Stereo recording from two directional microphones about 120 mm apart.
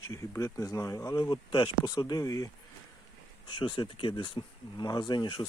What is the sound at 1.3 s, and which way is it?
Speech, 40° left (ahead or behind).